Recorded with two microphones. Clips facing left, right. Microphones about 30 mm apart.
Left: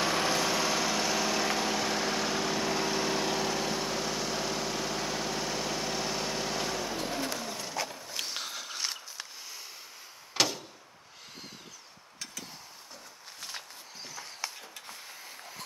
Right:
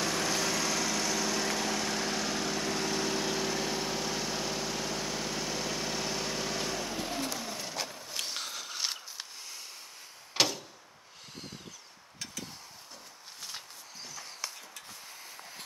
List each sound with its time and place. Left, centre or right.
0.0 s vehicle: left
7.3 s a sound: centre
10.4 s door: centre
13.4 s walk: centre